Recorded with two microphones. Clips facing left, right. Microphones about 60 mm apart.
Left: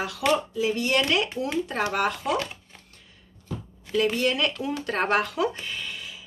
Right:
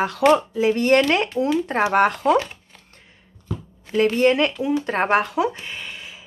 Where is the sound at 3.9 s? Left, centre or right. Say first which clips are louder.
Right 6 dB; right.